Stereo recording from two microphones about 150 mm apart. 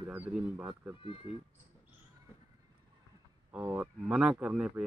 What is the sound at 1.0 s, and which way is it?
Speech, 35° left (ahead or behind).